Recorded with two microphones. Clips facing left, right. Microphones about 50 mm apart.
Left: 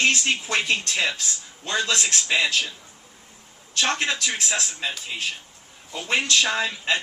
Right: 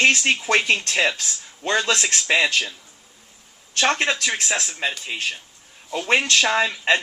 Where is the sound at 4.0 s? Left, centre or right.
Right.